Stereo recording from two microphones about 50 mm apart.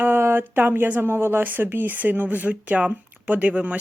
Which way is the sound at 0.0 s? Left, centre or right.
Right.